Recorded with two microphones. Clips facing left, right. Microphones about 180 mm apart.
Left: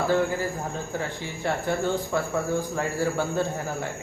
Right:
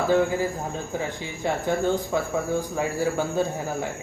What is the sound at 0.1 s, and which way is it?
Speech, 15° right (ahead or behind).